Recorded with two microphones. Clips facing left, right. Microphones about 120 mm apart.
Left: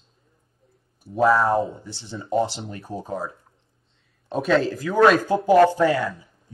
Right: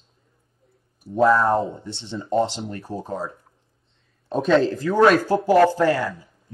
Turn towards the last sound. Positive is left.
turn(degrees=20)  # may be behind; listen again after turning